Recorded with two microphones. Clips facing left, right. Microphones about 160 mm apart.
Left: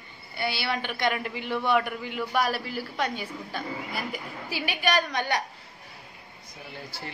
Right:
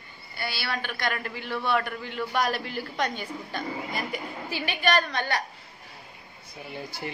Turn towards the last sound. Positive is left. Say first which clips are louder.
# right 4 dB
turn(degrees=-15)  # may be behind; listen again after turning